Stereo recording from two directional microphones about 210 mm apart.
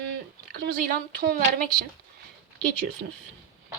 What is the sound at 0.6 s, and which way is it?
A woman's voice, 45° right (ahead or behind).